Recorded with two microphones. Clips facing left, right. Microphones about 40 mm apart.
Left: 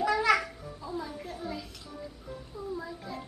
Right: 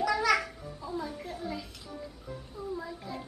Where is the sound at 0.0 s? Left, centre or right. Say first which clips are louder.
Left 1 dB; centre.